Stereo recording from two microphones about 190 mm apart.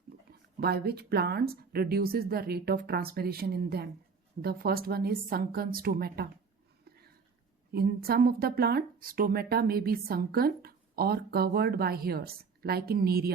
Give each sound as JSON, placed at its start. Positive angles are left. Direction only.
{"t": 0.3, "sound": "speech", "side_deg": -55}
{"t": 6.8, "sound": "a sound", "side_deg": -55}
{"t": 7.7, "sound": "speech", "side_deg": -55}